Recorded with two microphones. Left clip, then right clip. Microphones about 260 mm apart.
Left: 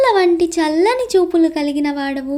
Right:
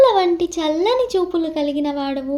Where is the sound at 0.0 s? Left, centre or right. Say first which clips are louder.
Left 1 dB; left.